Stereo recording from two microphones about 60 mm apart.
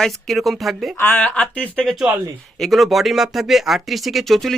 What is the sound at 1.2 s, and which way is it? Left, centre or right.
Speech, left.